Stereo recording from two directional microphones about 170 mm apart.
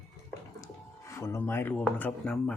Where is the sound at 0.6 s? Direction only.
15° left (ahead or behind).